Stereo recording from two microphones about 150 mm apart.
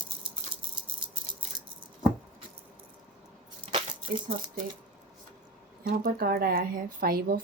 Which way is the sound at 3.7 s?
60° right (ahead or behind).